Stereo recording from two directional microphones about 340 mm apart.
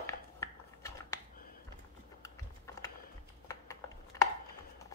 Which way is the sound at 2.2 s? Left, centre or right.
Centre.